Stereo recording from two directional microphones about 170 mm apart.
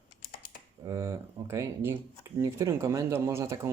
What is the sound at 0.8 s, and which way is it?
Speech, 20° right (ahead or behind).